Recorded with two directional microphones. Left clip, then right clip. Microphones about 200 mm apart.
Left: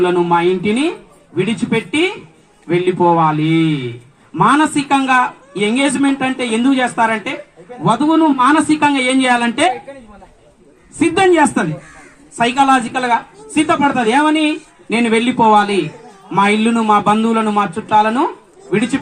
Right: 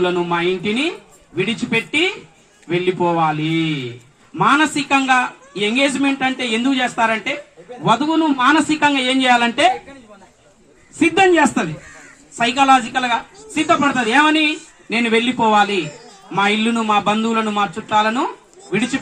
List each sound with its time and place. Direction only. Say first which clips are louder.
0.0 s a man's voice: left 5 dB; 45° left (ahead or behind)
11.0 s a man's voice: left 1 dB; 45° left (ahead or behind)